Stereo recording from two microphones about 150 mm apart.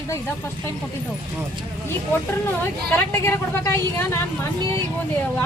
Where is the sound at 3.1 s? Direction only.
15° left (ahead or behind).